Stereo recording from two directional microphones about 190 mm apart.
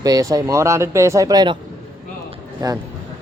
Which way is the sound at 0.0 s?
20° right (ahead or behind).